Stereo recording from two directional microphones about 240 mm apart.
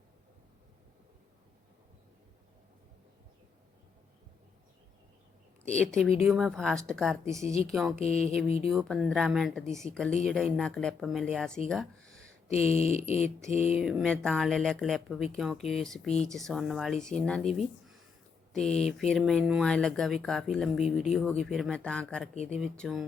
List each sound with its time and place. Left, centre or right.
5.6 s speech: centre
7.9 s mantra: left
8.7 s speech: centre
12.5 s mantra: left
13.7 s speech: centre
18.5 s speech: centre